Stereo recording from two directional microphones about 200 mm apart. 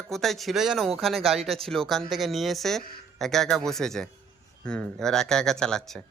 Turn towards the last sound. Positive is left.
turn(degrees=5)  # may be behind; listen again after turning